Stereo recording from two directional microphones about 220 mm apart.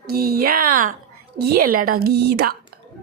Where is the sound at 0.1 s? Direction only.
45° right (ahead or behind).